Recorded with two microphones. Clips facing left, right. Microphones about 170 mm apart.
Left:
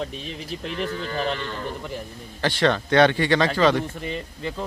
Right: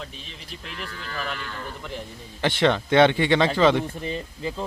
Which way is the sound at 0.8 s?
30° left (ahead or behind).